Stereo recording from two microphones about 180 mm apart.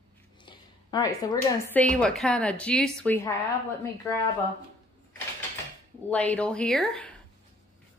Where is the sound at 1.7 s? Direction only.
5° left (ahead or behind).